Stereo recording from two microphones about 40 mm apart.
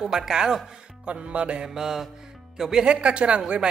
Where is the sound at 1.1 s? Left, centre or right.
Right.